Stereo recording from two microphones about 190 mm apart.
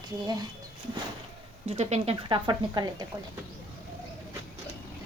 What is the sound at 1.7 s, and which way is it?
A woman's voice, 30° right (ahead or behind).